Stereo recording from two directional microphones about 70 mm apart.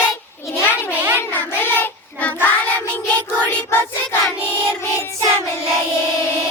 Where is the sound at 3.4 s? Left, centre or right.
Left.